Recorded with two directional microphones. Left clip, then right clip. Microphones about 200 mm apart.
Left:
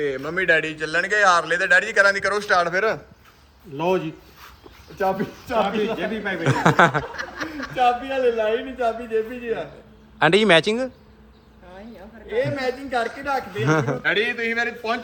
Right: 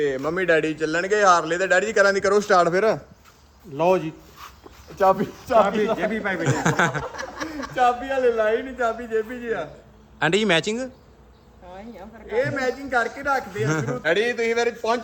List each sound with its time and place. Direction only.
0.0 s a man's voice: 45° right (ahead or behind)
3.8 s a man's voice: 15° right (ahead or behind)
7.2 s a sound: 55° right (ahead or behind)
7.7 s a man's voice: 10° right (ahead or behind)
12.9 s a man's voice: centre (ahead or behind)
14.0 s a man's voice: 50° right (ahead or behind)